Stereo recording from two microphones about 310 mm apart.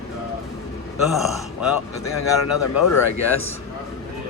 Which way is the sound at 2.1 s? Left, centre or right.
Left.